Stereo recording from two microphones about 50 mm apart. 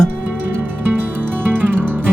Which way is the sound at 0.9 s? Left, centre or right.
Right.